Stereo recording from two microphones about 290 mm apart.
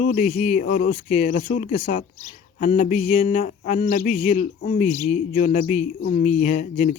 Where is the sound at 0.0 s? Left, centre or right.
Left.